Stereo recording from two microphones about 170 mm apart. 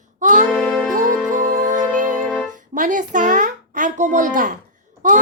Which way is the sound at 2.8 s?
50° right (ahead or behind).